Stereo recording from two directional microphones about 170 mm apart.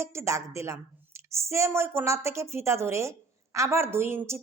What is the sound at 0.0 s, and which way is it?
Speech, 15° right (ahead or behind).